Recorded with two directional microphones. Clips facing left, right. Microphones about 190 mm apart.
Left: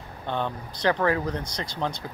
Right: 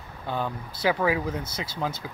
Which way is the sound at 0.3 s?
5° right (ahead or behind).